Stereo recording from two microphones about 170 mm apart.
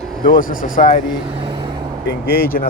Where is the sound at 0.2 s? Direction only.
50° left (ahead or behind).